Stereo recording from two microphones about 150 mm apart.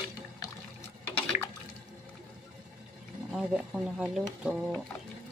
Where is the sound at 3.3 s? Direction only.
5° right (ahead or behind).